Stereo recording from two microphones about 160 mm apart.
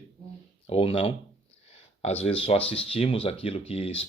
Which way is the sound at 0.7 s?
35° left (ahead or behind).